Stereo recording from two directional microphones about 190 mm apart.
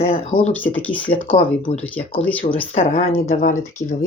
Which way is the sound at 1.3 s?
45° left (ahead or behind).